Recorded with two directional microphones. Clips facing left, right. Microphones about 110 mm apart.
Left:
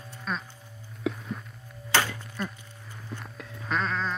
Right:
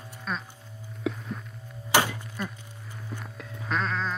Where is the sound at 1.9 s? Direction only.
15° right (ahead or behind).